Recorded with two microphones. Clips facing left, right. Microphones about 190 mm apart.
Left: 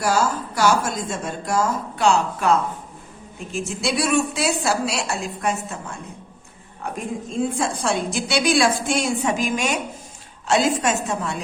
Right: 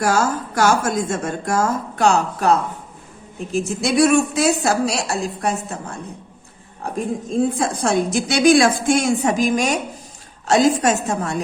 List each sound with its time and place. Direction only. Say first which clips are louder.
0.0 s a woman's voice: right 2 dB; 50° right (ahead or behind)
7.3 s a woman's voice: right 3 dB; 40° right (ahead or behind)